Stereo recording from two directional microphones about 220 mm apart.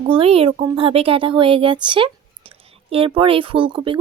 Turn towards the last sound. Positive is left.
turn(degrees=-25)  # may be behind; listen again after turning